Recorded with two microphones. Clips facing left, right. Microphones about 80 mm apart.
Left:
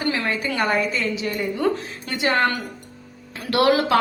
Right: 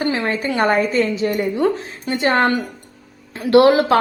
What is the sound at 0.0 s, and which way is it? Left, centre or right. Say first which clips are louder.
A woman's voice: right 4 dB; right.